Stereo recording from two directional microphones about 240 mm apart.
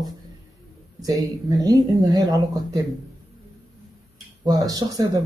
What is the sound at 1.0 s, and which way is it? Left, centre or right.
Speech, centre.